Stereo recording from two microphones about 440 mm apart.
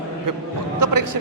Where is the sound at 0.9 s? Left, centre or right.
Right.